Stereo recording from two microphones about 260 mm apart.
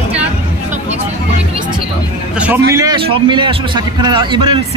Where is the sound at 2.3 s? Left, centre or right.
Centre.